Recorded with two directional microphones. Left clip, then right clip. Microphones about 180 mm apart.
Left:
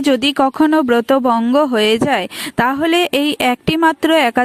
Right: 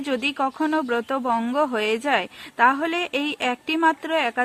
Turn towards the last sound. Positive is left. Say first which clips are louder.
# left 10 dB
turn(degrees=45)  # may be behind; listen again after turning